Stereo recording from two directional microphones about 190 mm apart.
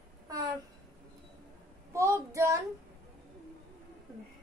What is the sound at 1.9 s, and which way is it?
Speech, 15° right (ahead or behind).